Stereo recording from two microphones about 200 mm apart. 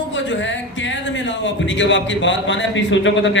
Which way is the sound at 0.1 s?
65° left (ahead or behind).